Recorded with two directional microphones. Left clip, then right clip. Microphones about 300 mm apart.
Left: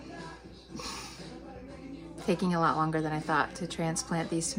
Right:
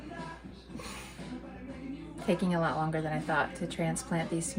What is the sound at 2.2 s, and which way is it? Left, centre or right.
A woman's voice, centre.